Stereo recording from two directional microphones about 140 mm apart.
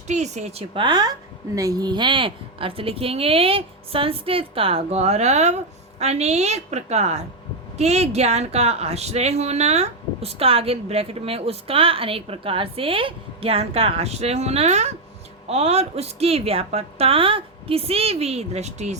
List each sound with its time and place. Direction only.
0.1 s speech: 55° right (ahead or behind)